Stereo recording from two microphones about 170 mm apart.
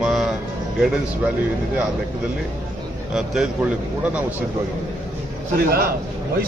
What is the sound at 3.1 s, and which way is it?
Speech, centre (ahead or behind).